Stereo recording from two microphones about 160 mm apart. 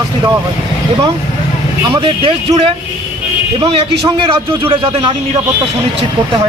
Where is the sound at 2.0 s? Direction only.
35° right (ahead or behind).